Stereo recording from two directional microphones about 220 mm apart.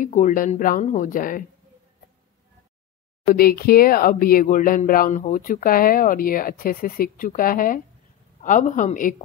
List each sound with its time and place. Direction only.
0.0 s speech: 35° left (ahead or behind)
3.3 s speech: 40° left (ahead or behind)